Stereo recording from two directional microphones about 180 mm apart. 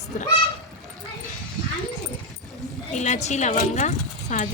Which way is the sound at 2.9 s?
40° left (ahead or behind).